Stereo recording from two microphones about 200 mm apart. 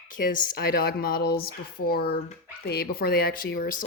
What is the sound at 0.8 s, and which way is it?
Speech, 50° left (ahead or behind).